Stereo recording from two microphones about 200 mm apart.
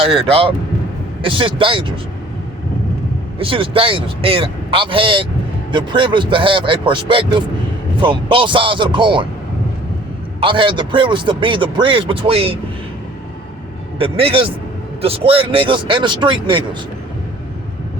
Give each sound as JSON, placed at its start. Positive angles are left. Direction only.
{"t": 0.0, "sound": "a man's voice", "side_deg": -30}
{"t": 3.3, "sound": "a man's voice", "side_deg": -25}
{"t": 10.4, "sound": "a man's voice", "side_deg": -25}
{"t": 14.0, "sound": "a man's voice", "side_deg": -30}